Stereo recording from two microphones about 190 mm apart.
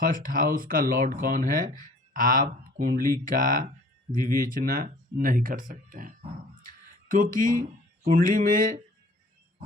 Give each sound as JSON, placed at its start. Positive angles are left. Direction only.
{"t": 0.0, "sound": "speech", "side_deg": -45}